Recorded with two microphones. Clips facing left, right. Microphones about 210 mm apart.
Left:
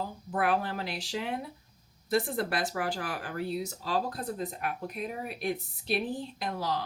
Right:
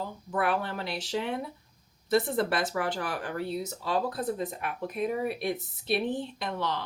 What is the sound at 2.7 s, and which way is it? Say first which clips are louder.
Speech: right 2 dB; 45° right (ahead or behind).